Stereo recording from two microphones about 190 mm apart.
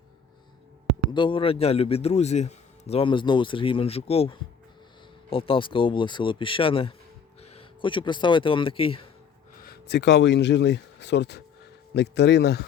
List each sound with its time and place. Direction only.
1.1 s a man's voice: 25° left (ahead or behind)
9.6 s speech: 55° left (ahead or behind)